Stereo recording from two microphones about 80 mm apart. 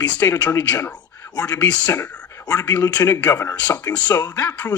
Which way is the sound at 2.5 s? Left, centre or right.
Left.